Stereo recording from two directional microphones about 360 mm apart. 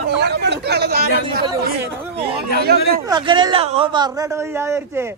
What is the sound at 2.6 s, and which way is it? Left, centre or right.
Speech, right.